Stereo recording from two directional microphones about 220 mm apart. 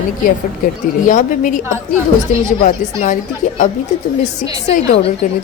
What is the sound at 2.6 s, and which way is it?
Speech, 35° left (ahead or behind).